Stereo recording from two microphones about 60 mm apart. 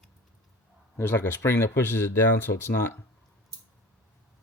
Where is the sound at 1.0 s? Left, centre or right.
Left.